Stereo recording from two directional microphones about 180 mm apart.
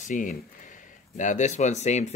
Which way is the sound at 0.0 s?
45° left (ahead or behind).